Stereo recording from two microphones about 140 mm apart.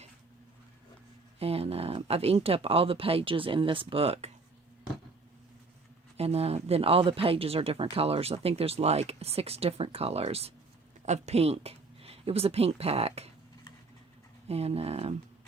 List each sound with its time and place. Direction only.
1.4 s speech: 45° right (ahead or behind)
6.1 s speech: 45° right (ahead or behind)
14.4 s speech: 45° right (ahead or behind)